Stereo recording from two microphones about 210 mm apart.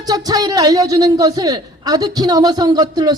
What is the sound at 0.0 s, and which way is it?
Speech, 20° right (ahead or behind).